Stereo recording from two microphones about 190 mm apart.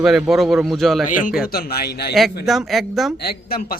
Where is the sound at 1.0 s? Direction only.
45° left (ahead or behind).